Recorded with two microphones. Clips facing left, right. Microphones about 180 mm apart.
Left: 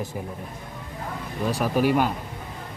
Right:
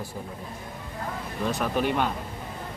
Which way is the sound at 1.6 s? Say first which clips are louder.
Left 5 dB; 5° left (ahead or behind).